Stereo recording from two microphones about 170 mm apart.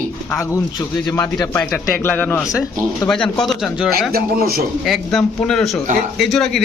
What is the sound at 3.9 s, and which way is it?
Speech, 65° right (ahead or behind).